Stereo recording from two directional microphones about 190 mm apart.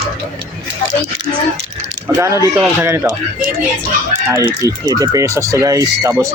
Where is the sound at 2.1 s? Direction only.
15° right (ahead or behind).